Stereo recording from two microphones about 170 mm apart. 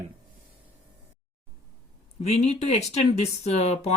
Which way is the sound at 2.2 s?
40° left (ahead or behind).